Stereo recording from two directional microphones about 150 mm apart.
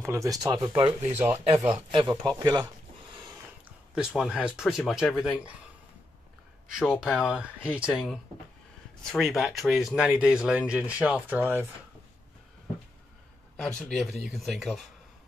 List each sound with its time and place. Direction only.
0.0 s speech: 20° right (ahead or behind)
1.1 s speech: 10° right (ahead or behind)
1.7 s speech: 35° right (ahead or behind)
2.3 s a sound: 25° right (ahead or behind)
4.2 s speech: 5° right (ahead or behind)
6.7 s speech: 5° right (ahead or behind)
13.6 s speech: 5° left (ahead or behind)